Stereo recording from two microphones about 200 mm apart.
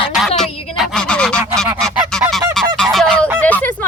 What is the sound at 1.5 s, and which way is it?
Goose, centre (ahead or behind).